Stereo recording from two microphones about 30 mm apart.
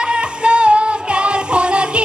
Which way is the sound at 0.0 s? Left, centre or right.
Right.